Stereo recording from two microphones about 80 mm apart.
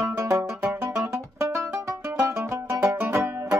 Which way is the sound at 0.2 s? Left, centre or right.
Right.